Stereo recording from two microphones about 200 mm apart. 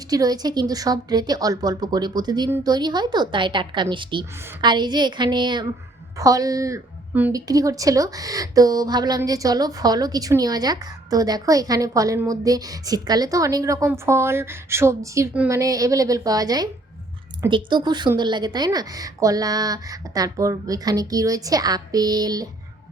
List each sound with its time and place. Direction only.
0.1 s a woman's voice: 20° right (ahead or behind)